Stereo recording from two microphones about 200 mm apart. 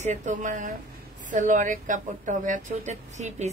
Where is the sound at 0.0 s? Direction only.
35° right (ahead or behind).